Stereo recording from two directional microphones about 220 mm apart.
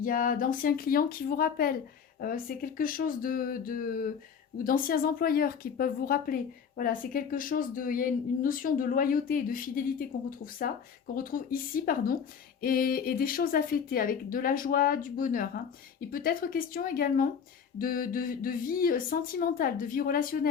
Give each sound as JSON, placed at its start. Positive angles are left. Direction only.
{"t": 0.0, "sound": "speech", "side_deg": 40}